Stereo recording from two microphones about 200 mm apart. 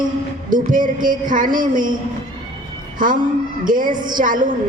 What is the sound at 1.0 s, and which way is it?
Music, 40° right (ahead or behind).